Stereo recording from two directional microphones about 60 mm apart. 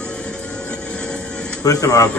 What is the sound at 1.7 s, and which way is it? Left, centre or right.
Speech, left.